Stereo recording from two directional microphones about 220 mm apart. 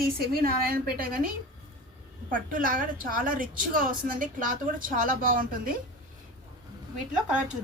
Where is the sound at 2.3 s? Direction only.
40° right (ahead or behind).